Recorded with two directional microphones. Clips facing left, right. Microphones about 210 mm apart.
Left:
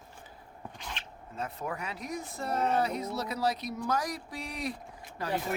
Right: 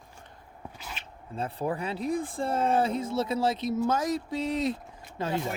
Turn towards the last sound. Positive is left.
turn(degrees=-25)  # may be behind; listen again after turning